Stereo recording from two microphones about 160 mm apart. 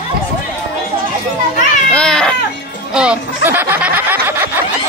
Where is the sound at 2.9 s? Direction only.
5° right (ahead or behind).